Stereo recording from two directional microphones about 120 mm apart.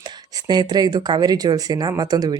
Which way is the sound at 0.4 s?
35° right (ahead or behind).